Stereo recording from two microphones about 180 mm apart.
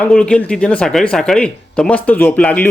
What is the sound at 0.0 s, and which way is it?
Speech, 5° left (ahead or behind).